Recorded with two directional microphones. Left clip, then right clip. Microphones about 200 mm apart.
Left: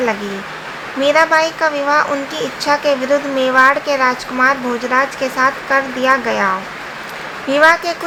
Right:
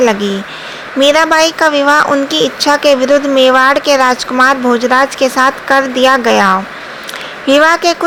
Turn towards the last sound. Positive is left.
turn(degrees=-40)  # may be behind; listen again after turning